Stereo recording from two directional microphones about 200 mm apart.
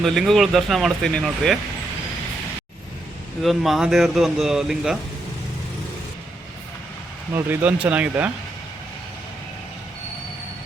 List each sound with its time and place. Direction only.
0.0 s speech: centre (ahead or behind)
3.4 s speech: centre (ahead or behind)
7.3 s speech: 10° right (ahead or behind)